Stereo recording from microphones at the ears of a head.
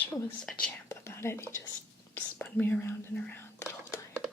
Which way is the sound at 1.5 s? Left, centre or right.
Left.